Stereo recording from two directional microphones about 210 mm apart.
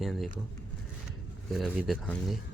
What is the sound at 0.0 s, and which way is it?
Speech, centre (ahead or behind).